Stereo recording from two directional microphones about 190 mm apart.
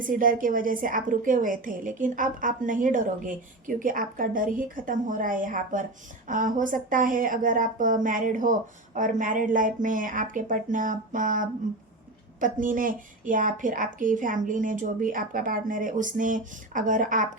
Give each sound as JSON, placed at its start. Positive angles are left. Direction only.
{"t": 0.0, "sound": "a woman's voice", "side_deg": -45}